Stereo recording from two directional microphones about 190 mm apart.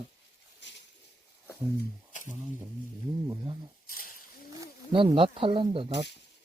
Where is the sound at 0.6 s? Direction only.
65° left (ahead or behind).